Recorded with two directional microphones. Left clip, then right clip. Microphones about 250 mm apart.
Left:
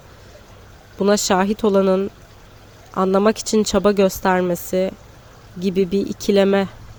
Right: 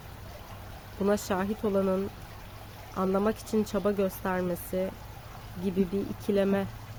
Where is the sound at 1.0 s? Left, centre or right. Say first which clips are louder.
Left 12 dB; left.